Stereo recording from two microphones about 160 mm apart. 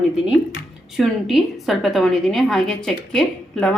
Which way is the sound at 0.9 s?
Centre (ahead or behind).